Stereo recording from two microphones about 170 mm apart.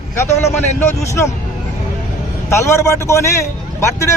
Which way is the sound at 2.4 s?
15° left (ahead or behind).